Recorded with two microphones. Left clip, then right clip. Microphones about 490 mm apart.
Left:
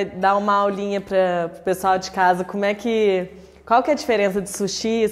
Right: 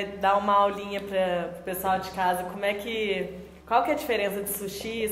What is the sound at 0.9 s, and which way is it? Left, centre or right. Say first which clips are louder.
A woman's voice: left 7 dB; left.